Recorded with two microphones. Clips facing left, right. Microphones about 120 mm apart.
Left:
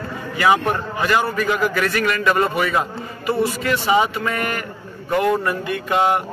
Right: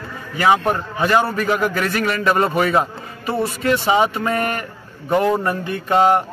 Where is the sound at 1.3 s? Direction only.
40° right (ahead or behind).